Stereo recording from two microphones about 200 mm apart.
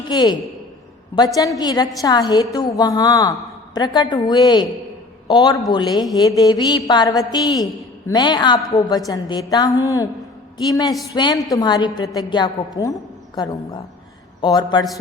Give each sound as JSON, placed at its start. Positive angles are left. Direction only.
{"t": 0.1, "sound": "a woman's voice", "side_deg": 20}